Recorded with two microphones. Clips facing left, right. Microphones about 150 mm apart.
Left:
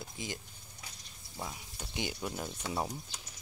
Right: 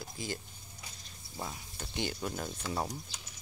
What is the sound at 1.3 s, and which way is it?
Speech, centre (ahead or behind).